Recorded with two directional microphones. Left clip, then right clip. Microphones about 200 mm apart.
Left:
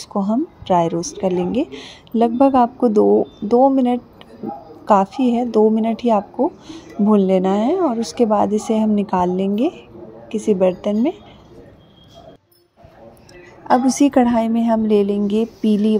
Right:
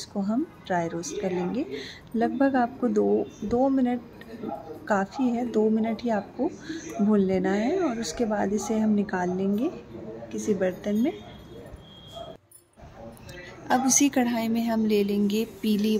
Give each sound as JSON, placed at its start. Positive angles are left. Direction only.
{"t": 0.1, "sound": "a woman's voice", "side_deg": 20}
{"t": 13.7, "sound": "a woman's voice", "side_deg": 25}